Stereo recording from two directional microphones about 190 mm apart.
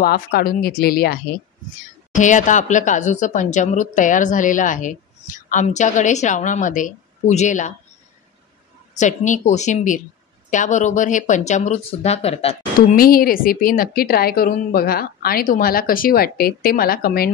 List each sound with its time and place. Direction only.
0.0 s a woman's voice: 50° left (ahead or behind)
2.1 s speech: 40° left (ahead or behind)
8.9 s speech: 40° left (ahead or behind)
12.9 s a woman's voice: 50° left (ahead or behind)